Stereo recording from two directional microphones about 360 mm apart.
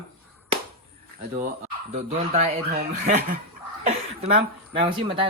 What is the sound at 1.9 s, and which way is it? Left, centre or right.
Speech, centre.